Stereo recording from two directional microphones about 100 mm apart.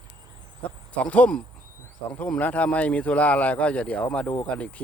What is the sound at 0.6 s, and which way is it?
Speech, 15° left (ahead or behind).